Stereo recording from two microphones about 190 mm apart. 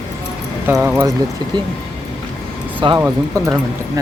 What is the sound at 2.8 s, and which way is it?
Speech, 25° right (ahead or behind).